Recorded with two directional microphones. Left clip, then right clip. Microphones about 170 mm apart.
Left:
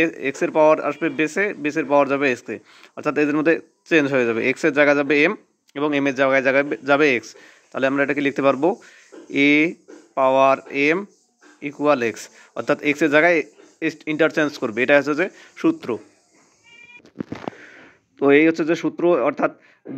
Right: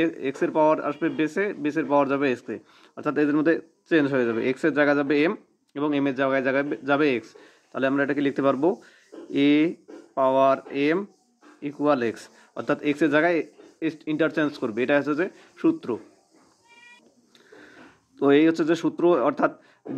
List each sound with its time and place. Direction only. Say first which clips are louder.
0.0 s speech: left 4 dB; 15° left (ahead or behind)
18.7 s a man's voice: left 2 dB; centre (ahead or behind)